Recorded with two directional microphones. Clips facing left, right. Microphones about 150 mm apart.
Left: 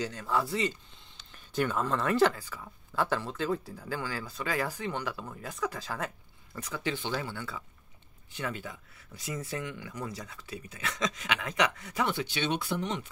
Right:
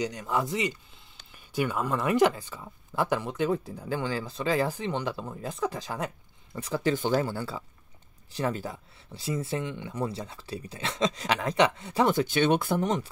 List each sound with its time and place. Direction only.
0.0 s speech: 15° right (ahead or behind)
6.6 s speech: 35° right (ahead or behind)